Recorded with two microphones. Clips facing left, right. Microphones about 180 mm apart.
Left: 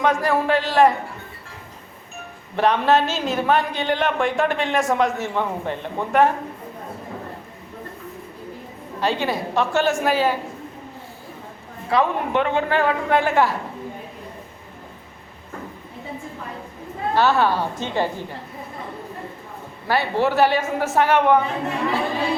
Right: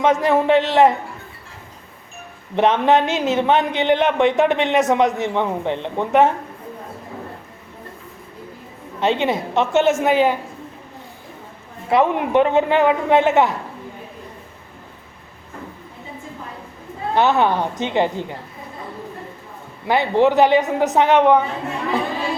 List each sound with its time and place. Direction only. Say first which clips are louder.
0.0 s a man's voice: right 4 dB; 20° right (ahead or behind)
2.6 s a man's voice: right 2 dB; 20° right (ahead or behind)
9.0 s a man's voice: right 4 dB; 20° right (ahead or behind)
11.9 s a man's voice: right 4 dB; 20° right (ahead or behind)
17.2 s a man's voice: right 2 dB; 20° right (ahead or behind)
19.9 s a man's voice: right 5 dB; 20° right (ahead or behind)